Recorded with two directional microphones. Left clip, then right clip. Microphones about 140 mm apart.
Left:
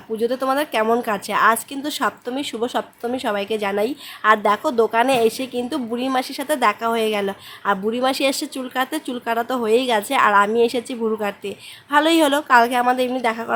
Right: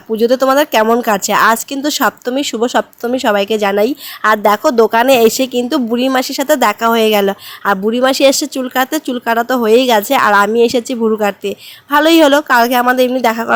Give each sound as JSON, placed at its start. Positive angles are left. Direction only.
{"t": 0.2, "sound": "speech", "side_deg": -50}
{"t": 12.8, "sound": "a woman's voice", "side_deg": -35}
{"t": 13.2, "sound": "speech", "side_deg": -50}